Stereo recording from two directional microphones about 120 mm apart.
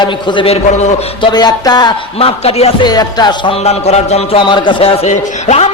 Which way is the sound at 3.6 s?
65° left (ahead or behind).